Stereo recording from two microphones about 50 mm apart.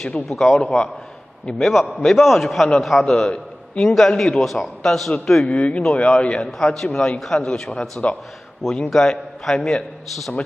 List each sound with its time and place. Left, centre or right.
0.0 s a man's voice: centre
0.6 s a man's voice: centre
1.6 s a man's voice: centre